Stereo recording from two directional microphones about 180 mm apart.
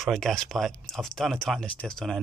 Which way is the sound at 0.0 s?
Centre (ahead or behind).